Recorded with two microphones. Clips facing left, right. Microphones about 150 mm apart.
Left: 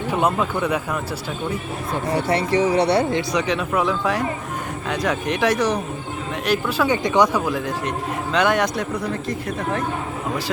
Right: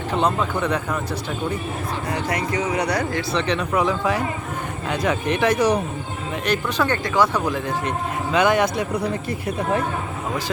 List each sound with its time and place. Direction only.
0.1 s speech: 10° left (ahead or behind)
2.1 s speech: 30° left (ahead or behind)
3.3 s a man's voice: 5° left (ahead or behind)
7.4 s a man's voice: centre (ahead or behind)